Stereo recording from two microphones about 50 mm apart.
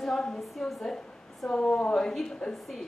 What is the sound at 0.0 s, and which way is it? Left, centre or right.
A woman's voice, centre.